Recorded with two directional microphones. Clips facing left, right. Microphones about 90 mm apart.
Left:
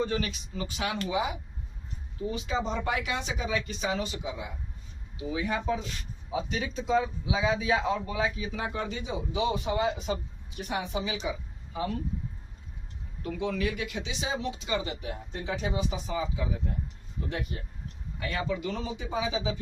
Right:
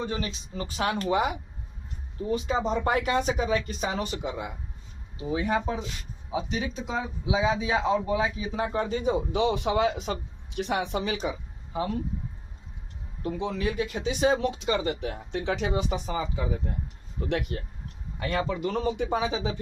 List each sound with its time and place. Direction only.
0.0 s speech: 25° right (ahead or behind)
0.5 s speech: 40° right (ahead or behind); by 1.4 s 60° right (ahead or behind)
2.3 s speech: 40° right (ahead or behind); by 4.5 s 60° right (ahead or behind)
5.1 s speech: 35° right (ahead or behind)
6.5 s speech: 20° right (ahead or behind); by 9.1 s 40° right (ahead or behind)
9.3 s a man's voice: 75° right (ahead or behind)
13.2 s speech: 30° right (ahead or behind)
14.1 s speech: 55° right (ahead or behind)
17.2 s a man's voice: 80° right
18.2 s speech: 40° right (ahead or behind); by 19.5 s 60° right (ahead or behind)